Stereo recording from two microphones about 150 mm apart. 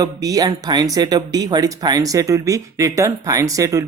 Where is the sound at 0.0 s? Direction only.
25° right (ahead or behind).